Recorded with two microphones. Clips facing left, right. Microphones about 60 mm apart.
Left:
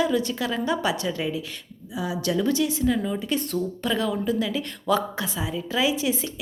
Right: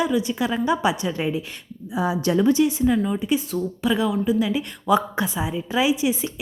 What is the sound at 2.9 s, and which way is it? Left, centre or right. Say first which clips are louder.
A woman's voice: right 4 dB; centre.